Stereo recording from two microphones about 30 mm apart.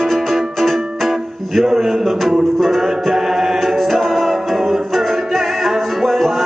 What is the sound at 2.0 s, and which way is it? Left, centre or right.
Speech, centre.